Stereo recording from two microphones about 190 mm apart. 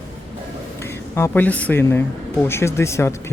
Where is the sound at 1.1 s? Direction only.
10° left (ahead or behind).